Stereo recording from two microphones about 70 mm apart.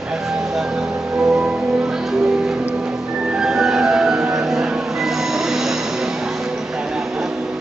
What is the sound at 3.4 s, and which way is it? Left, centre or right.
Music, centre.